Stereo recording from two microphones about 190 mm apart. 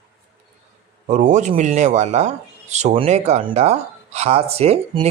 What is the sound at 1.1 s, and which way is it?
Speech, 40° right (ahead or behind).